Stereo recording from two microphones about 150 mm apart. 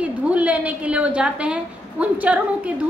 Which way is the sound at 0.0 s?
10° right (ahead or behind).